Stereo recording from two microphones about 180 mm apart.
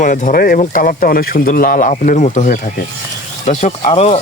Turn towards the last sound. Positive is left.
turn(degrees=35)  # may be behind; listen again after turning